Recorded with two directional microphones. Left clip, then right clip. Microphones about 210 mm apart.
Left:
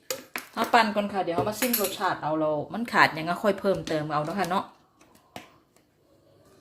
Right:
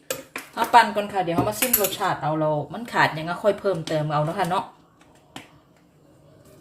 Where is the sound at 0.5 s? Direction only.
30° left (ahead or behind).